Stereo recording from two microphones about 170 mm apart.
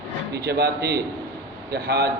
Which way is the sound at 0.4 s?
70° right (ahead or behind).